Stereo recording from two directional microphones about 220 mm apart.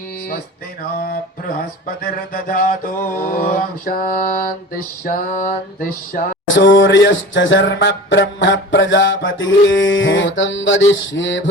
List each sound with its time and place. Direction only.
2.3 s mantra: 40° left (ahead or behind)
5.4 s mantra: 40° left (ahead or behind)
6.4 s a sound: 60° left (ahead or behind)